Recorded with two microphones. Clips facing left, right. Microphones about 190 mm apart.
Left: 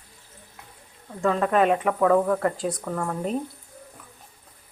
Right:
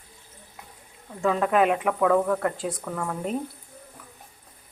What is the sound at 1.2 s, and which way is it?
Speech, 5° right (ahead or behind).